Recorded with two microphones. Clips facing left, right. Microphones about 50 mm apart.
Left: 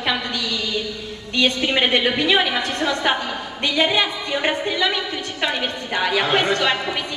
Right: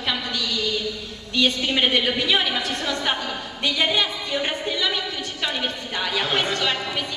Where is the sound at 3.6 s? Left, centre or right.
Centre.